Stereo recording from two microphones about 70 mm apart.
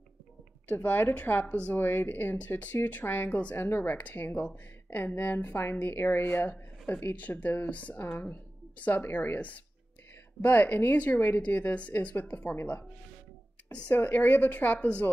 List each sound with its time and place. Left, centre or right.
0.8 s a woman's voice: left
3.6 s a woman's voice: left